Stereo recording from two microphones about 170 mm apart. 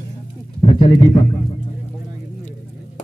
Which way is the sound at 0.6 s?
30° left (ahead or behind).